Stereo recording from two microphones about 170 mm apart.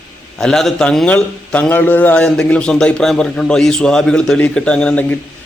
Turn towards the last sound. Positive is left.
turn(degrees=10)  # may be behind; listen again after turning